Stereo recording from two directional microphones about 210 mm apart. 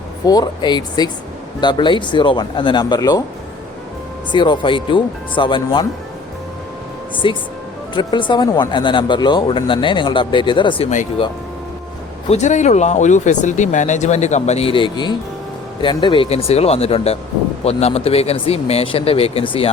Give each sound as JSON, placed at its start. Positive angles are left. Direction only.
{"t": 0.3, "sound": "speech", "side_deg": 20}
{"t": 4.3, "sound": "speech", "side_deg": 20}
{"t": 7.2, "sound": "speech", "side_deg": 25}
{"t": 12.3, "sound": "speech", "side_deg": 35}